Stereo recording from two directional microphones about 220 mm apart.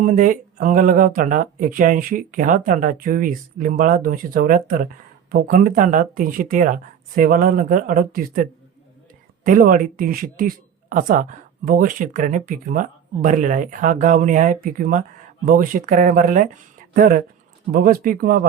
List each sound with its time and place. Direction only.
0.0 s a woman's voice: 35° right (ahead or behind)